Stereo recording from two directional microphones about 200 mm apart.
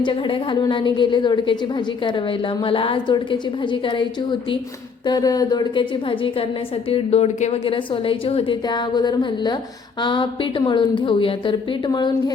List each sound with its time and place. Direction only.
0.0 s a woman's voice: 25° left (ahead or behind)
2.6 s a woman's voice: 25° left (ahead or behind)